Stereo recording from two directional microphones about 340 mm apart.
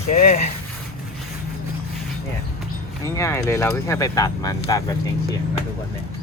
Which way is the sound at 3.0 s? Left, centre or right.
Centre.